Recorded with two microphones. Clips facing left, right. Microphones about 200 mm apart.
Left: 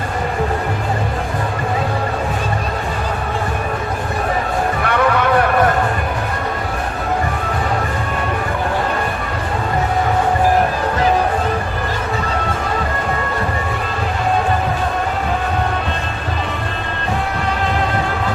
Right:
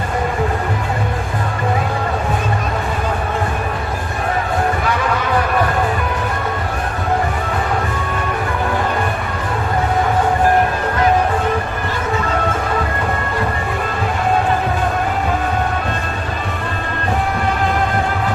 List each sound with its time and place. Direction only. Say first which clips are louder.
4.8 s music: left 3 dB; 60° left (ahead or behind)